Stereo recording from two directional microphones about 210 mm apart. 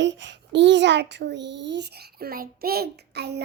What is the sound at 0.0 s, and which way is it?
A child's voice, 60° right (ahead or behind).